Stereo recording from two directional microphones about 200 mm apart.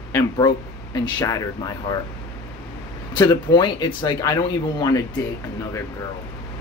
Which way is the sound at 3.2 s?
20° left (ahead or behind).